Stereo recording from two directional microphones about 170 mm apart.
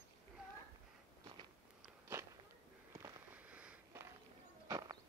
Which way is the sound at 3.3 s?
10° right (ahead or behind).